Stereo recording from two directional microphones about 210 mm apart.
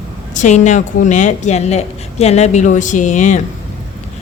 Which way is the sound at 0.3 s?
35° left (ahead or behind).